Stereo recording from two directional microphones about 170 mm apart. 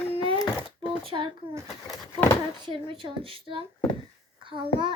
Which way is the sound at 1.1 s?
30° right (ahead or behind).